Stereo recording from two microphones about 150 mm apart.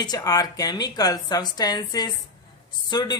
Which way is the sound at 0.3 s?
25° left (ahead or behind).